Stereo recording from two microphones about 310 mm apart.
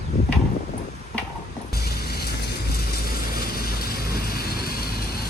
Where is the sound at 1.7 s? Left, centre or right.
Left.